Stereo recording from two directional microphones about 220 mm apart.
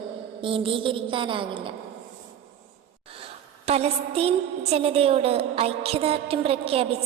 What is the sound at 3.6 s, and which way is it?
Music, 30° right (ahead or behind).